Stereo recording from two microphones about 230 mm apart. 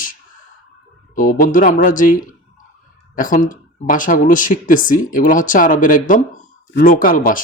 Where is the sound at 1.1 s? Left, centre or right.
Left.